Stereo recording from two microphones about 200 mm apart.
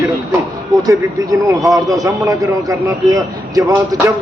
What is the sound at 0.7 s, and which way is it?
A man's voice, 15° right (ahead or behind).